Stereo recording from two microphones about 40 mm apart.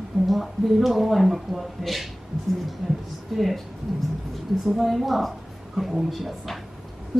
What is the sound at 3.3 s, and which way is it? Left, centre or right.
Speech, centre.